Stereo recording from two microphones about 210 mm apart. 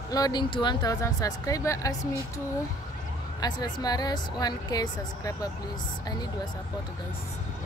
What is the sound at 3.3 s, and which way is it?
Speech, 20° left (ahead or behind).